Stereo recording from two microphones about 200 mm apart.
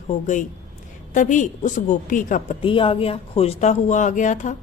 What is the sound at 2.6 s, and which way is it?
A woman's voice, 25° left (ahead or behind).